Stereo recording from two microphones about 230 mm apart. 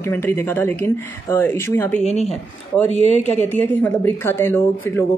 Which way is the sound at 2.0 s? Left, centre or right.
Left.